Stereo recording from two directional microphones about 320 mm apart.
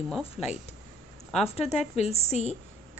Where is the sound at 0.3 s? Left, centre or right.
Left.